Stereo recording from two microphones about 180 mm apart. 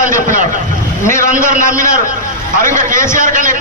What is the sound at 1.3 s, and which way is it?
Speech, 50° right (ahead or behind).